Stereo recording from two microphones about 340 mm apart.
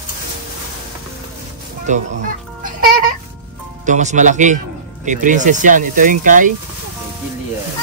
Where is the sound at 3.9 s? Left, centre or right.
Right.